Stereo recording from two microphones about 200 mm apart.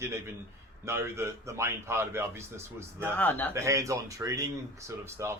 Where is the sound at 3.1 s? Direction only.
10° left (ahead or behind).